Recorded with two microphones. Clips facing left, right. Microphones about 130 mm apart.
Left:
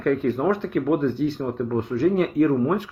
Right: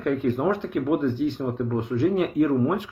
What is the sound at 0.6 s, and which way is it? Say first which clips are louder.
Speech: left 2 dB; 10° right (ahead or behind).